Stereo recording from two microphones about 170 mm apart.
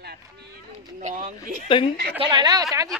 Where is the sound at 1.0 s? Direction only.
50° right (ahead or behind).